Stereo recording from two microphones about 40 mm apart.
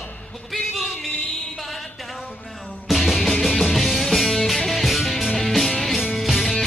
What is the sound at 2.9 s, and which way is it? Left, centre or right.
Music, centre.